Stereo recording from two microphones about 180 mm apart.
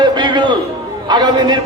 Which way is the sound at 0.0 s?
25° right (ahead or behind).